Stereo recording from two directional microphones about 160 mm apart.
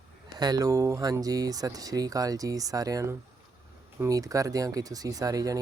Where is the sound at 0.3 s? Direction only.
25° right (ahead or behind).